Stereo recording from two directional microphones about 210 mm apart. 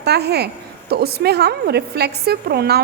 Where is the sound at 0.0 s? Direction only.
50° right (ahead or behind).